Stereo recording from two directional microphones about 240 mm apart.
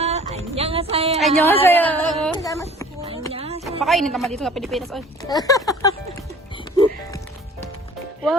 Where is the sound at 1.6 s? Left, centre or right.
Centre.